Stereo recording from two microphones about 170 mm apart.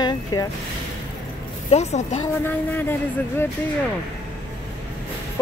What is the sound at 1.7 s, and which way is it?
Speech, 40° left (ahead or behind).